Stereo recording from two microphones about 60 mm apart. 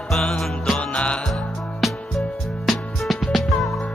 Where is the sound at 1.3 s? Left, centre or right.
Centre.